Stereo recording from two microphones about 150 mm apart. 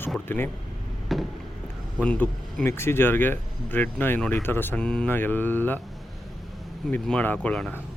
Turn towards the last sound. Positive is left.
turn(degrees=10)  # may be behind; listen again after turning